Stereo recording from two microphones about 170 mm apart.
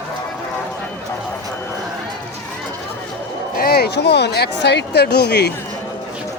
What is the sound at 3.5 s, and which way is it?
Speech, 65° left (ahead or behind).